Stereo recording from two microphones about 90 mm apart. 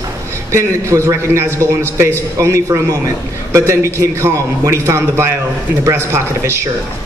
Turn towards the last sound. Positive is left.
turn(degrees=-30)  # may be behind; listen again after turning